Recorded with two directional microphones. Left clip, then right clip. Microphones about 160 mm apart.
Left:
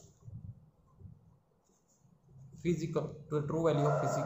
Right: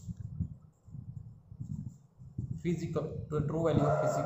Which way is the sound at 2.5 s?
15° left (ahead or behind).